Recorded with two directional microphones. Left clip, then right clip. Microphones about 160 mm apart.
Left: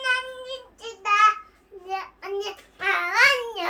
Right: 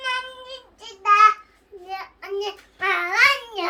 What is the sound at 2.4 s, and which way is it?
Babbling, 20° left (ahead or behind).